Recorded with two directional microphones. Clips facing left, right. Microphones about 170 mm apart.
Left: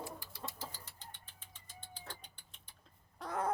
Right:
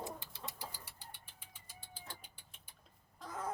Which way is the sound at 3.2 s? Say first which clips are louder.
Left 6 dB; 65° left (ahead or behind).